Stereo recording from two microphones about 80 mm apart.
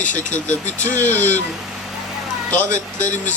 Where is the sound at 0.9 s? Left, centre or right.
Left.